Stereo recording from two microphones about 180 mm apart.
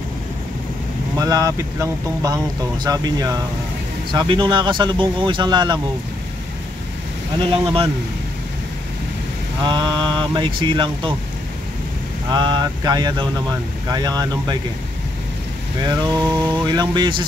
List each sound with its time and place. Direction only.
1.1 s speech: 20° right (ahead or behind)
7.5 s speech: 30° right (ahead or behind)
9.6 s speech: 25° right (ahead or behind)
12.3 s speech: 25° right (ahead or behind)
15.8 s speech: 20° right (ahead or behind)